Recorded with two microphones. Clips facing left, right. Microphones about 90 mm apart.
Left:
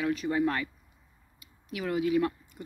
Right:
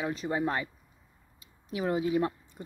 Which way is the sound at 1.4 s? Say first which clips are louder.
Right 3 dB; 25° right (ahead or behind).